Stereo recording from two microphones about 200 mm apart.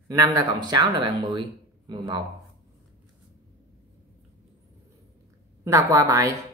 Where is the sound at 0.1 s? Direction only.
15° right (ahead or behind).